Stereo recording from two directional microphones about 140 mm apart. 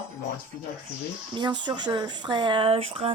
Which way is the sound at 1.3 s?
35° right (ahead or behind).